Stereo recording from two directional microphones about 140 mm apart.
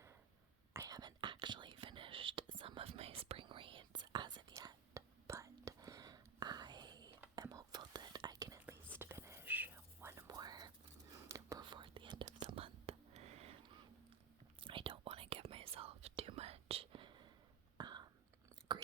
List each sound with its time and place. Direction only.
0.7 s whispering: 25° right (ahead or behind)
8.6 s whispering: 15° right (ahead or behind); by 13.6 s 50° right (ahead or behind)
14.6 s whispering: 35° right (ahead or behind)